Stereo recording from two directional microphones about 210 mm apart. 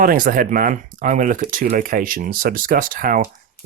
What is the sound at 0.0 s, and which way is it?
Speech, 40° right (ahead or behind).